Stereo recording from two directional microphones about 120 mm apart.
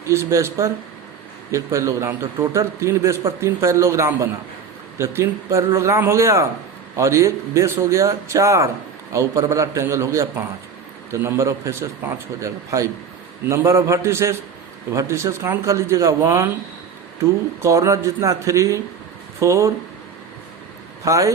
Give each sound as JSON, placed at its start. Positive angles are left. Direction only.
{"t": 0.0, "sound": "a man's voice", "side_deg": -25}
{"t": 17.6, "sound": "a man's voice", "side_deg": -25}
{"t": 21.0, "sound": "a man's voice", "side_deg": -25}